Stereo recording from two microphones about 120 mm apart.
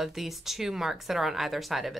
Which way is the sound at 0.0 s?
Centre (ahead or behind).